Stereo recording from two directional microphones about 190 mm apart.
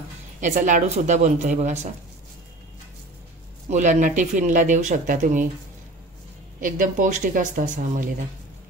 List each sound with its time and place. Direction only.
0.4 s speech: 40° right (ahead or behind)
3.7 s speech: 40° right (ahead or behind)
6.6 s speech: 45° right (ahead or behind)